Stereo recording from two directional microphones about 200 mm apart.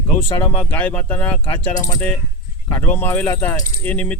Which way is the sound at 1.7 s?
20° left (ahead or behind).